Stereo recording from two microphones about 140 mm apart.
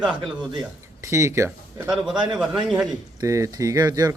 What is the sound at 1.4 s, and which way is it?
Speech, 5° right (ahead or behind).